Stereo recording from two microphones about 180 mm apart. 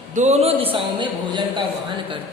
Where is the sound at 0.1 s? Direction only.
40° right (ahead or behind).